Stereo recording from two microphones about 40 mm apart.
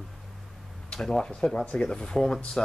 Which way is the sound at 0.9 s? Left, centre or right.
Centre.